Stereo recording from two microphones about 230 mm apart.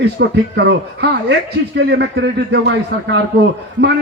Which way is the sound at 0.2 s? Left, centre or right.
Right.